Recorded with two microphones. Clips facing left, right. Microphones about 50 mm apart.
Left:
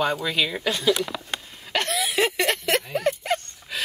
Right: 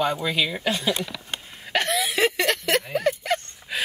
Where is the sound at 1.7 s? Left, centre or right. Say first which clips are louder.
Right 2 dB; centre.